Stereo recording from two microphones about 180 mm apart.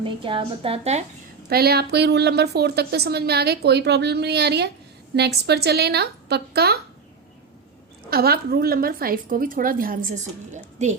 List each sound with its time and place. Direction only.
0.0 s a woman's voice: 30° right (ahead or behind)
1.5 s a woman's voice: 60° right (ahead or behind)
8.1 s a woman's voice: 60° right (ahead or behind)